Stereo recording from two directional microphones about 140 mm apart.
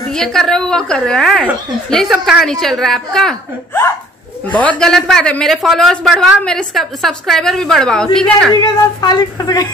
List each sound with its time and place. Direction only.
0.1 s speech: 5° left (ahead or behind)
4.5 s speech: 10° left (ahead or behind)
9.0 s speech: 30° left (ahead or behind)